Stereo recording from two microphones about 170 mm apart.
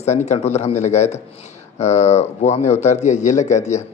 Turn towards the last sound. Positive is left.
turn(degrees=45)  # may be behind; listen again after turning